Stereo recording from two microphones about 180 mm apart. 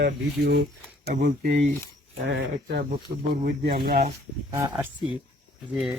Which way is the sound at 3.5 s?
60° right (ahead or behind).